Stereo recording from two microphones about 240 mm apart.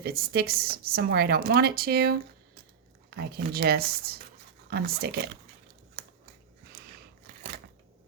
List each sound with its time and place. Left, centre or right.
0.0 s a woman's voice: right
3.2 s a woman's voice: right
6.7 s a sound: right